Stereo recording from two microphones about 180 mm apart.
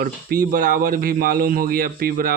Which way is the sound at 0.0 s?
55° right (ahead or behind).